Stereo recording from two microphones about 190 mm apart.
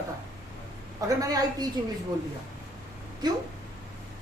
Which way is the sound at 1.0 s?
20° right (ahead or behind).